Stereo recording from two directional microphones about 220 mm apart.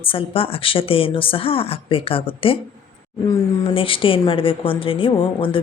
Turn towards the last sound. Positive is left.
turn(degrees=25)  # may be behind; listen again after turning